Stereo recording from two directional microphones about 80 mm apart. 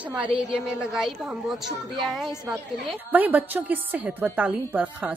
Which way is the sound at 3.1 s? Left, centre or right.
Right.